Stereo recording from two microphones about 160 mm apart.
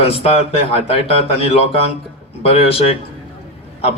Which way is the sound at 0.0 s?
35° left (ahead or behind).